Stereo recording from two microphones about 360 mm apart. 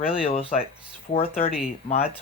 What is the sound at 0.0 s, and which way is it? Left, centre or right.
Speech, centre.